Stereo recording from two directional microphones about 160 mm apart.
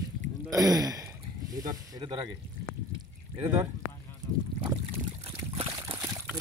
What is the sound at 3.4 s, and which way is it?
Speech, 10° right (ahead or behind).